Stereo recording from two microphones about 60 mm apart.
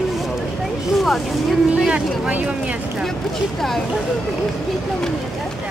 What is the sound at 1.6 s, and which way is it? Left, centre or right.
Speech, centre.